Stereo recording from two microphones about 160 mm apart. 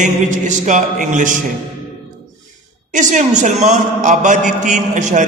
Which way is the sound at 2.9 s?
50° right (ahead or behind).